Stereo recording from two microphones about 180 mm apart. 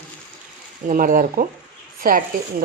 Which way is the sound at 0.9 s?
50° right (ahead or behind).